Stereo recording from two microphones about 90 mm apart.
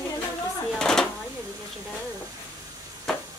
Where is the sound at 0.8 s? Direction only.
5° left (ahead or behind).